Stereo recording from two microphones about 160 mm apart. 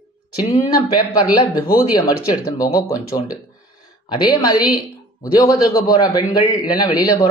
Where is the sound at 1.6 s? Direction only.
70° left (ahead or behind).